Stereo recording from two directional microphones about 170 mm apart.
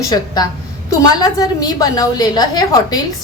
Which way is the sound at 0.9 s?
20° left (ahead or behind).